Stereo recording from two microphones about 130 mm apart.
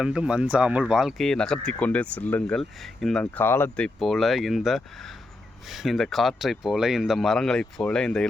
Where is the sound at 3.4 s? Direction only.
15° left (ahead or behind).